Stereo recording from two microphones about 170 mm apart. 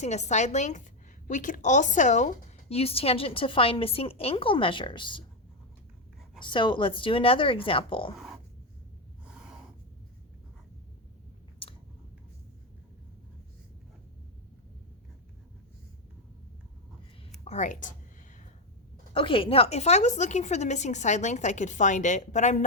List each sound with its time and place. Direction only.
0.0 s a woman's voice: 40° left (ahead or behind)
6.4 s a woman's voice: 30° left (ahead or behind)
17.4 s a woman's voice: 45° left (ahead or behind)
19.1 s a woman's voice: 30° left (ahead or behind)